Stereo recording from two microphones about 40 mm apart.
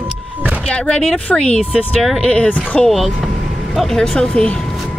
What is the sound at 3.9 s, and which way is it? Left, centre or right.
Speech, centre.